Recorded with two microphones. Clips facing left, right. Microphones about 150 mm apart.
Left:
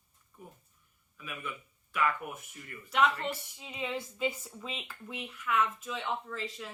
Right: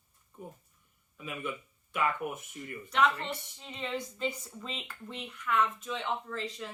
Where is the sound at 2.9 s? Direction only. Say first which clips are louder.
Even; 5° left (ahead or behind).